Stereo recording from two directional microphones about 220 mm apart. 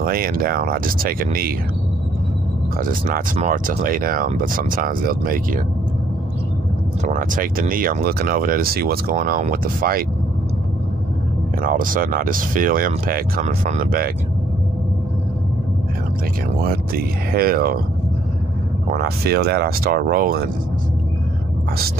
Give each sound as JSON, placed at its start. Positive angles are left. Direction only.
{"t": 0.0, "sound": "speech", "side_deg": -40}
{"t": 2.8, "sound": "speech", "side_deg": -40}
{"t": 7.1, "sound": "speech", "side_deg": -40}
{"t": 11.6, "sound": "speech", "side_deg": -40}
{"t": 16.6, "sound": "speech", "side_deg": -45}
{"t": 18.9, "sound": "speech", "side_deg": -45}